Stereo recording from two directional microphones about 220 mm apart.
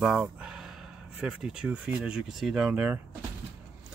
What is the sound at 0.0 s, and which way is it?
Speech, 5° right (ahead or behind).